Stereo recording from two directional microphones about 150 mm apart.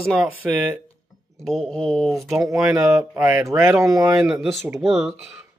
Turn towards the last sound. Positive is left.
turn(degrees=0)  # may be behind; listen again after turning